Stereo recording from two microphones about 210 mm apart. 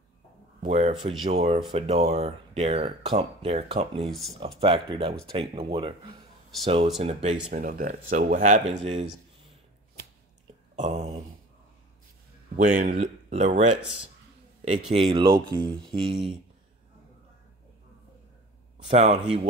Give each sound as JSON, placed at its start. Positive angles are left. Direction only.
{"t": 0.6, "sound": "speech", "side_deg": -30}
{"t": 7.5, "sound": "speech", "side_deg": -40}
{"t": 10.8, "sound": "a sound", "side_deg": -30}
{"t": 12.6, "sound": "speech", "side_deg": -35}
{"t": 15.0, "sound": "speech", "side_deg": -25}
{"t": 18.9, "sound": "speech", "side_deg": -30}